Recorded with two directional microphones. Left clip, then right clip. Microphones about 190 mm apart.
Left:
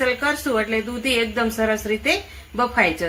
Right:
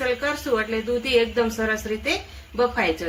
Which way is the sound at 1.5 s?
45° left (ahead or behind).